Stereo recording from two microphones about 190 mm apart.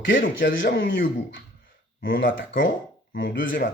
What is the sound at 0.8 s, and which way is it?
Speech, 85° left.